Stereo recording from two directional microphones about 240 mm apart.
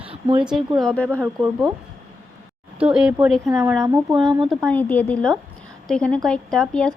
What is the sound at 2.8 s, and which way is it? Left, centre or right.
A woman's voice, centre.